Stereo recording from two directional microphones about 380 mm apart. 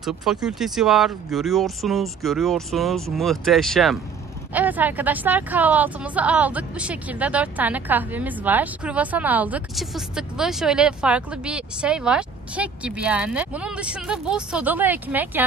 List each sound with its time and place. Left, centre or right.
0.0 s a woman's voice: centre